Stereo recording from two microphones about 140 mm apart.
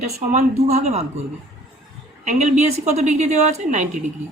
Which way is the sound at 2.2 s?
55° right (ahead or behind).